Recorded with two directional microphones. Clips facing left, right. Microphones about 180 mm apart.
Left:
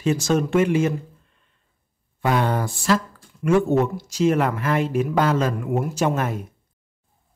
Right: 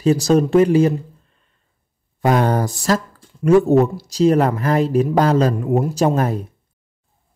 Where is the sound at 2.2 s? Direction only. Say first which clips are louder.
Right 5 dB; 40° right (ahead or behind).